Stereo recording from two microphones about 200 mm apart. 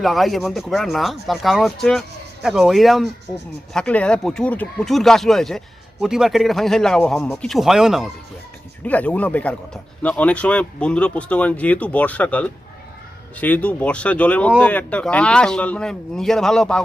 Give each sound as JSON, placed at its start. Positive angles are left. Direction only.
{"t": 0.0, "sound": "speech", "side_deg": 0}